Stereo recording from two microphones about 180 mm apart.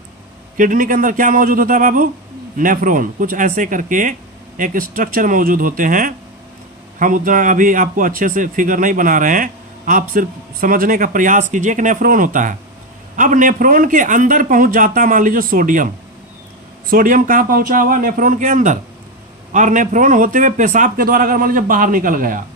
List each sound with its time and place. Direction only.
0.5 s a man's voice: 50° right (ahead or behind)
16.9 s a man's voice: 50° right (ahead or behind)